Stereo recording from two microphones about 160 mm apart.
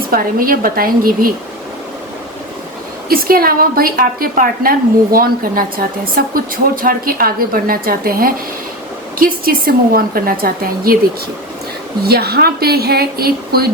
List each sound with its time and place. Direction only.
0.1 s a woman's voice: 60° right (ahead or behind)
3.1 s a woman's voice: 65° right (ahead or behind)
12.0 s speech: 75° right (ahead or behind)